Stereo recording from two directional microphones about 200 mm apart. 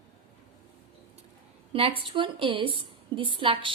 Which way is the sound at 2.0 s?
25° right (ahead or behind).